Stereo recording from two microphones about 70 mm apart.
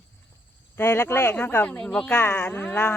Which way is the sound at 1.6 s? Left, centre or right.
Centre.